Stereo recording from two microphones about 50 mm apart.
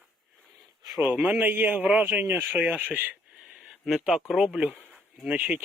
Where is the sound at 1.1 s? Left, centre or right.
Right.